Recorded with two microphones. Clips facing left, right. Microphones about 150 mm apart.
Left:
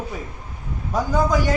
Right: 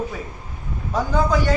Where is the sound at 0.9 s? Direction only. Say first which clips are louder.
Even; 10° left (ahead or behind).